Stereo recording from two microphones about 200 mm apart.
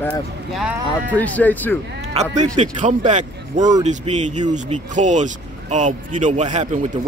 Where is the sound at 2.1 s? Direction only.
35° right (ahead or behind).